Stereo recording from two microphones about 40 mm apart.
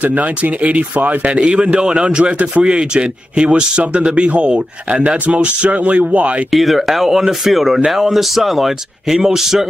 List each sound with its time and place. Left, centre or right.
0.0 s speech: right
6.5 s speech: centre